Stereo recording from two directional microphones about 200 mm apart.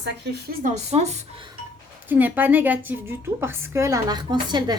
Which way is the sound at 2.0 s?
10° right (ahead or behind).